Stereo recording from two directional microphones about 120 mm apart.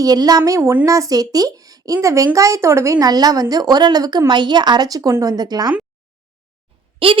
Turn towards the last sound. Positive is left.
turn(degrees=-50)  # may be behind; listen again after turning